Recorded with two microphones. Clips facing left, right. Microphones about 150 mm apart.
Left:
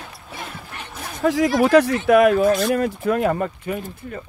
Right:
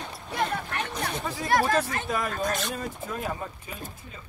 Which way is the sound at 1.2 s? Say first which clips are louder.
Left 9 dB; 90° left.